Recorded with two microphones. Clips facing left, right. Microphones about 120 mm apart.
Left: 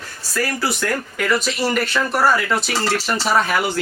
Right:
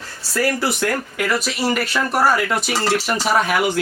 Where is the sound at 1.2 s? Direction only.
5° right (ahead or behind).